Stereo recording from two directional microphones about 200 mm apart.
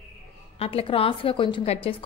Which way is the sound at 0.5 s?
30° left (ahead or behind).